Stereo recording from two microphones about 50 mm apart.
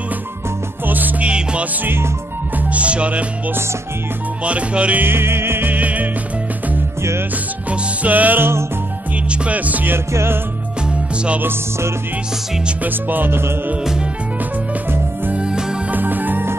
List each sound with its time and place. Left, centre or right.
0.8 s music: right
1.3 s music: right
2.7 s music: right
4.5 s music: right
5.0 s music: right
5.7 s music: right
7.0 s music: right
7.7 s music: right
9.9 s music: right
12.8 s music: right
15.3 s music: centre
15.9 s music: right